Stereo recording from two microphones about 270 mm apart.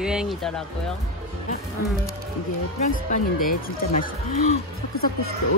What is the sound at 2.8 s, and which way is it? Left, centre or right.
Speech, left.